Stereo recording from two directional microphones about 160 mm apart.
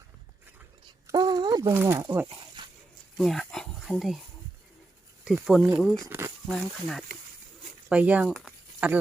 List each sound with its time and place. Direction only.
1.0 s speech: 25° right (ahead or behind)
2.6 s a sound: 30° right (ahead or behind)
3.2 s speech: centre (ahead or behind)
5.2 s speech: 5° right (ahead or behind)
6.1 s speech: 15° right (ahead or behind)
6.5 s speech: centre (ahead or behind)